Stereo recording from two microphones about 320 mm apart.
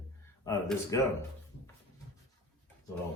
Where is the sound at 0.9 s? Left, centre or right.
Centre.